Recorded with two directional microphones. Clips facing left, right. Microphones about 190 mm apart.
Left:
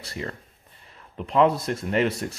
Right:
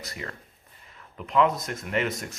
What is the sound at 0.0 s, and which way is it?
Speech, 30° left (ahead or behind).